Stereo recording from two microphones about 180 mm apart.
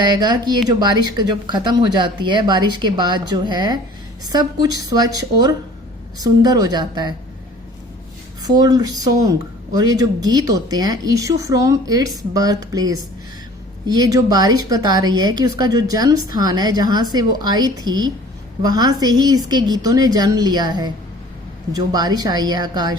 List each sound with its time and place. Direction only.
0.1 s a woman's voice: 20° right (ahead or behind)
8.4 s a woman's voice: 20° right (ahead or behind)